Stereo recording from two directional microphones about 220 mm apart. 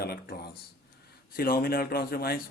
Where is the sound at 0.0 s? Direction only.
45° left (ahead or behind).